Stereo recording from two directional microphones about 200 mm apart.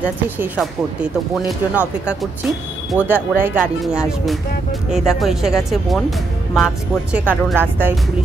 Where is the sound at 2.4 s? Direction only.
5° right (ahead or behind).